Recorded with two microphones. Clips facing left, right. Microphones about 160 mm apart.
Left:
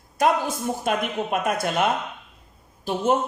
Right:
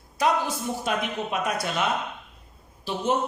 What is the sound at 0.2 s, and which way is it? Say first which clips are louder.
Speech: left 3 dB; 50° left (ahead or behind).